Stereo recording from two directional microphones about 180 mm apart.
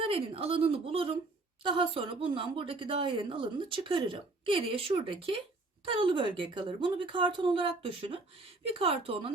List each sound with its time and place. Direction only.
0.0 s a woman's voice: 30° right (ahead or behind)